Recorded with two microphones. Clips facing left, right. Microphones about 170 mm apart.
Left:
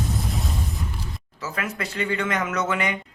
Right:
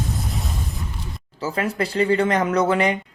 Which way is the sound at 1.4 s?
30° right (ahead or behind).